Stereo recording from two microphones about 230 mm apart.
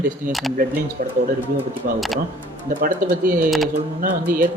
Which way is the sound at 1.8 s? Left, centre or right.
Right.